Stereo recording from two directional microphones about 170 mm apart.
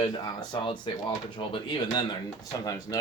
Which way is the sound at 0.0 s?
25° left (ahead or behind).